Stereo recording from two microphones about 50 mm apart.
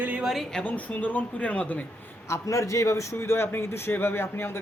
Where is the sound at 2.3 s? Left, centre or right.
Left.